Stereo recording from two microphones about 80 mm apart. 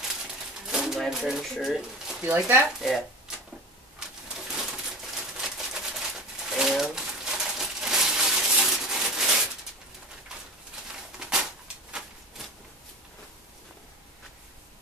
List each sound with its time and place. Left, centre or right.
0.1 s pigeon: centre
1.1 s speech: centre
2.3 s speech: right
2.8 s speech: centre
4.0 s bird: centre
11.1 s a sound: centre